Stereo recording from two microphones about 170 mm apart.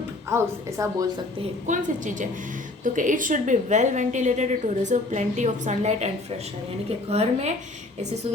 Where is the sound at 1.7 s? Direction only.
50° right (ahead or behind).